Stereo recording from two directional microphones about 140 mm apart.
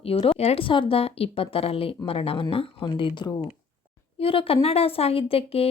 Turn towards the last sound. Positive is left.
turn(degrees=45)  # may be behind; listen again after turning